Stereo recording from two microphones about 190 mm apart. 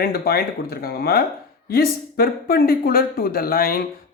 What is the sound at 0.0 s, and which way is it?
Speech, 55° left (ahead or behind).